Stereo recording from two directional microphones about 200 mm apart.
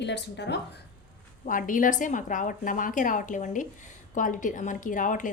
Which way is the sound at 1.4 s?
40° left (ahead or behind).